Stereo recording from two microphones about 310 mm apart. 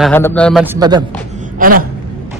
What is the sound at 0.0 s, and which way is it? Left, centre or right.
A man's voice, centre.